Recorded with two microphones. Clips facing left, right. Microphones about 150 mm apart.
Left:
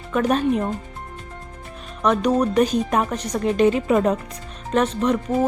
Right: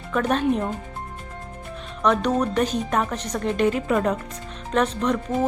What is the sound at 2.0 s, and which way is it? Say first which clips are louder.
A woman's voice: left 2 dB; 10° left (ahead or behind).